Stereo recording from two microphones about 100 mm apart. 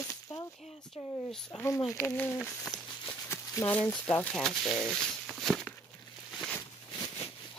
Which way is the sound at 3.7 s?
15° left (ahead or behind).